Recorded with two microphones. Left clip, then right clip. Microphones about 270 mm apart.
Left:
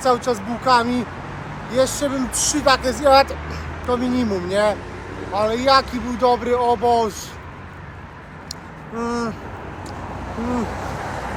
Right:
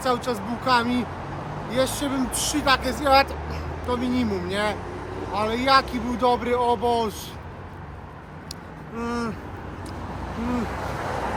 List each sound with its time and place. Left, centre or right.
0.0 s speech: centre
9.0 s speech: centre
11.1 s vehicle: right